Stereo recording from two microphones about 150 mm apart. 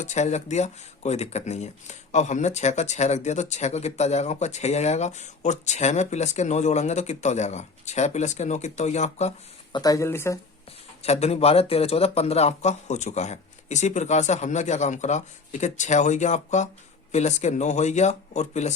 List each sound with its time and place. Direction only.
0.0 s speech: 50° left (ahead or behind)
9.7 s speech: 25° left (ahead or behind)
11.0 s speech: 45° left (ahead or behind)